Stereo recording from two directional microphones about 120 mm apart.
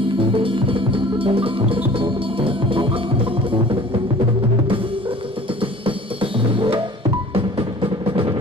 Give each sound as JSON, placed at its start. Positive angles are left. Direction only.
{"t": 0.0, "sound": "music", "side_deg": -45}
{"t": 5.6, "sound": "music", "side_deg": -45}